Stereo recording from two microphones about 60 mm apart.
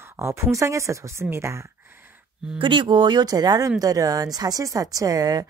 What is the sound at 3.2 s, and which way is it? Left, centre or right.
A woman's voice, right.